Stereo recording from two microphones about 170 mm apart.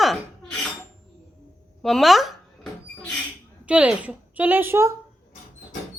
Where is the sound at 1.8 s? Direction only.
Centre (ahead or behind).